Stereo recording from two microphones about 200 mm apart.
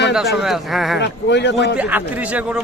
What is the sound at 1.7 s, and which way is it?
Speech, 5° right (ahead or behind).